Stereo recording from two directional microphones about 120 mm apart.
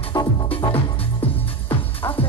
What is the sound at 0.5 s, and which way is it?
Music, 50° left (ahead or behind).